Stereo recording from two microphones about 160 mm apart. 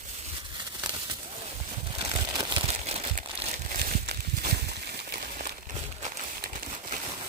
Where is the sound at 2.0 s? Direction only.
30° right (ahead or behind).